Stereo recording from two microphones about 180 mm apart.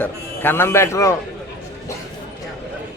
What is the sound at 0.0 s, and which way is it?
A man's voice, 10° left (ahead or behind).